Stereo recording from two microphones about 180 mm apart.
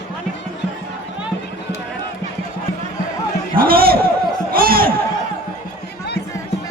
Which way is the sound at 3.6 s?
55° right (ahead or behind).